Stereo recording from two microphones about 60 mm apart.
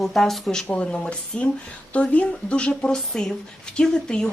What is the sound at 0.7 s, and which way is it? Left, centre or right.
A woman's voice, centre.